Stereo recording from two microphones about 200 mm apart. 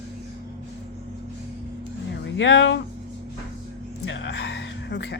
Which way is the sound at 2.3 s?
65° left (ahead or behind).